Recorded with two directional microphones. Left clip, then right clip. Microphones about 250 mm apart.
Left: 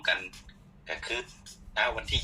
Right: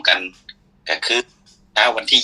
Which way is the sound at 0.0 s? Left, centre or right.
Right.